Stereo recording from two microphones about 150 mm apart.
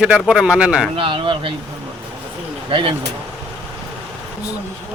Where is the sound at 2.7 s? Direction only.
35° right (ahead or behind).